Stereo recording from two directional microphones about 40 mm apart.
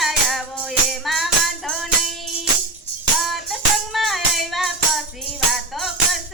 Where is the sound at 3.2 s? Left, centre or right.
Centre.